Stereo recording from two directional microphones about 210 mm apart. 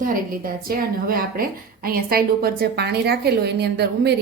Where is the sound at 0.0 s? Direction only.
40° right (ahead or behind).